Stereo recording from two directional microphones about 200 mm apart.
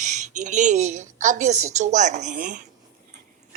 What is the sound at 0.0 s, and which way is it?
Speech, 35° right (ahead or behind).